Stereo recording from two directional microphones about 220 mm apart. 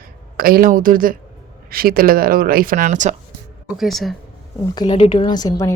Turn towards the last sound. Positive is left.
turn(degrees=20)  # may be behind; listen again after turning